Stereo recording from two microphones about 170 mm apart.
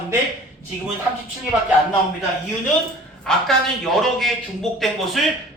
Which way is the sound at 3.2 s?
Centre (ahead or behind).